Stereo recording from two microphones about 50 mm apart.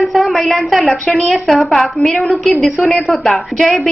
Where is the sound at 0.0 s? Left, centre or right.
Centre.